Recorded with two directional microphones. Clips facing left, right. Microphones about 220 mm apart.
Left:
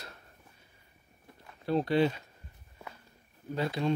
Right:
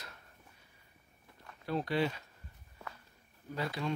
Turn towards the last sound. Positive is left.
turn(degrees=25)  # may be behind; listen again after turning